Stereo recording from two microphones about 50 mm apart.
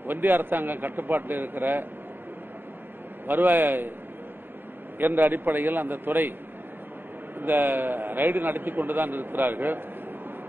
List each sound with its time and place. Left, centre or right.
0.0 s a man's voice: right
3.3 s a man's voice: right
4.9 s a man's voice: right
7.3 s a man's voice: right